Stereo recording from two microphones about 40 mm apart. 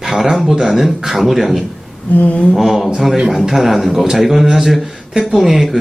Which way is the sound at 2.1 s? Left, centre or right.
Left.